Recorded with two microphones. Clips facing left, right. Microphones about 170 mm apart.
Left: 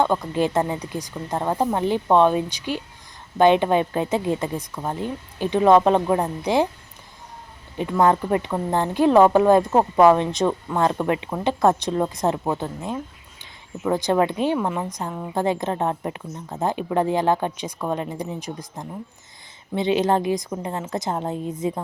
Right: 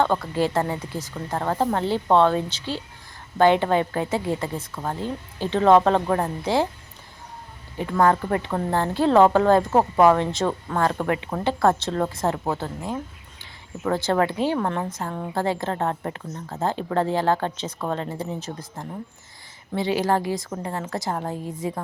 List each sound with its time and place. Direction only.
0.0 s a woman's voice: 15° left (ahead or behind)
7.8 s a woman's voice: 20° left (ahead or behind)